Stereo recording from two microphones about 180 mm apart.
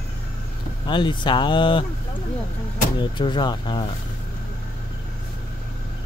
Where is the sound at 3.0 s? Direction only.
25° left (ahead or behind).